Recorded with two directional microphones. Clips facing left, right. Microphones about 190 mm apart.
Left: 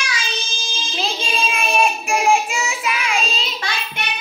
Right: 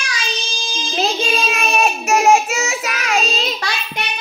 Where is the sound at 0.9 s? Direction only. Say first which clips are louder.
Right 5 dB; 45° right (ahead or behind).